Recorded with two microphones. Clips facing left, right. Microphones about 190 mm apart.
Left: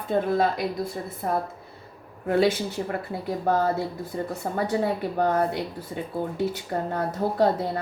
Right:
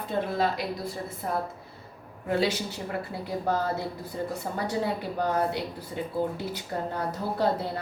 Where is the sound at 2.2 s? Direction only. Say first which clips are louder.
Left 5 dB; 50° left (ahead or behind).